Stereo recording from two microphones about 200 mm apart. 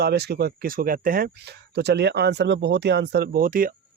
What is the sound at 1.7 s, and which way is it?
Speech, 55° right (ahead or behind).